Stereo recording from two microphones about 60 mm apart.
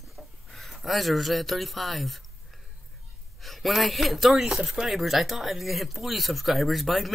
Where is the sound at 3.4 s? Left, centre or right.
Centre.